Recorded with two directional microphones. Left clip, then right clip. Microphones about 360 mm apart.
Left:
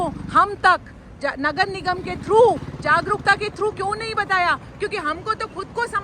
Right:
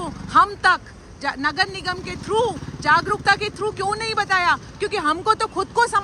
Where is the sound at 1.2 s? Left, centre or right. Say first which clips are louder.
Even; centre.